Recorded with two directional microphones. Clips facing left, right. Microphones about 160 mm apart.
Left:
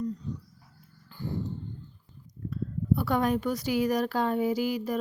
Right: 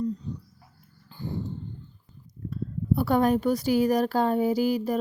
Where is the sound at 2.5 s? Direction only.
35° right (ahead or behind).